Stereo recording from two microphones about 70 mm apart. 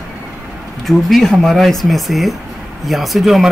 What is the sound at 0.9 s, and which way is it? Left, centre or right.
A man's voice, centre.